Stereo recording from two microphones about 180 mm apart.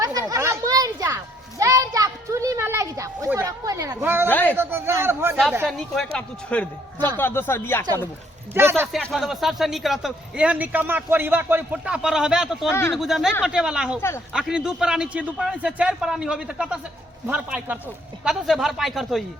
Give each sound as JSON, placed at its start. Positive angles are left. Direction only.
{"t": 0.0, "sound": "children playing", "side_deg": -20}
{"t": 4.3, "sound": "a sound", "side_deg": 10}
{"t": 4.5, "sound": "a sound", "side_deg": -15}
{"t": 5.6, "sound": "a man's voice", "side_deg": 0}
{"t": 8.6, "sound": "a man's voice", "side_deg": -15}
{"t": 8.9, "sound": "speech", "side_deg": 5}
{"t": 12.7, "sound": "a man's voice", "side_deg": 15}
{"t": 13.0, "sound": "a man's voice", "side_deg": 0}